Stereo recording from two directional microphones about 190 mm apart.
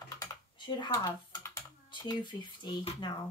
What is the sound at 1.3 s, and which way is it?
Typing, 20° left (ahead or behind).